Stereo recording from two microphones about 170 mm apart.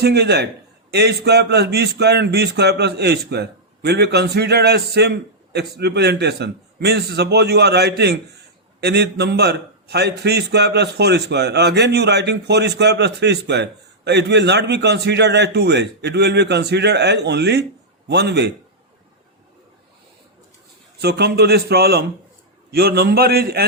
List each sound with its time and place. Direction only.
0.0 s a man's voice: 75° right (ahead or behind)
21.0 s a man's voice: 70° right (ahead or behind)